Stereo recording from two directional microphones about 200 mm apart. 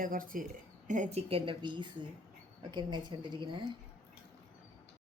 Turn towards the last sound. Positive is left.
turn(degrees=-25)  # may be behind; listen again after turning